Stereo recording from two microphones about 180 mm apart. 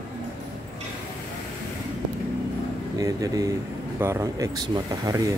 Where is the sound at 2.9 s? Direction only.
20° right (ahead or behind).